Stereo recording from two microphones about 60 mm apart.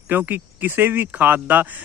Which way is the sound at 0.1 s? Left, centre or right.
Right.